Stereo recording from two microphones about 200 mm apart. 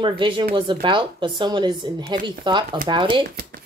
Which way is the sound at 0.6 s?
25° right (ahead or behind).